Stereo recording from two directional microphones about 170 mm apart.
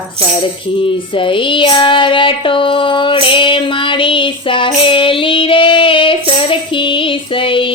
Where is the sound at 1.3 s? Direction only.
30° left (ahead or behind).